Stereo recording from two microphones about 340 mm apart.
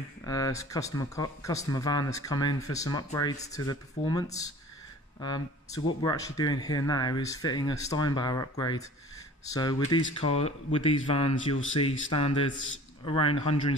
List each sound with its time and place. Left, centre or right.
0.2 s speech: centre
5.9 s speech: centre